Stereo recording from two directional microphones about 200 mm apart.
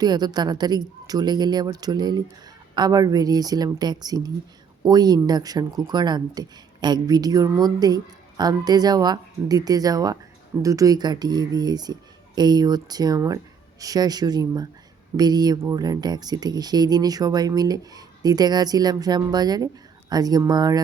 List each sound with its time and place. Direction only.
0.0 s speech: 20° right (ahead or behind)